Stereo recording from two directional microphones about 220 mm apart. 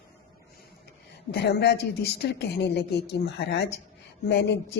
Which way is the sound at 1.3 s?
50° left (ahead or behind).